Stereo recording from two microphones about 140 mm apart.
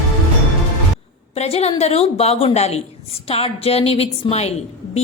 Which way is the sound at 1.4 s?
45° left (ahead or behind).